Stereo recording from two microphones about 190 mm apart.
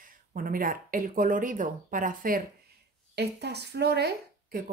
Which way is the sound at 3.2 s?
60° right (ahead or behind).